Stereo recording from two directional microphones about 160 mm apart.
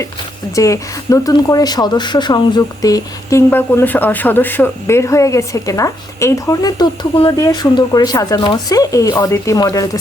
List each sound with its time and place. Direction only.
0.5 s speech: 20° left (ahead or behind)